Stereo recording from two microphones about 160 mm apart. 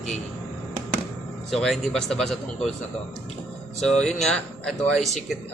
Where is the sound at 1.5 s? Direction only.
Centre (ahead or behind).